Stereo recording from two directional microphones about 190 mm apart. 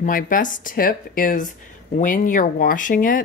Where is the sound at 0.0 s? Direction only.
45° left (ahead or behind).